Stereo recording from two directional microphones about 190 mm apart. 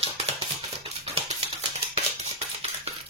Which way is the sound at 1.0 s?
35° right (ahead or behind).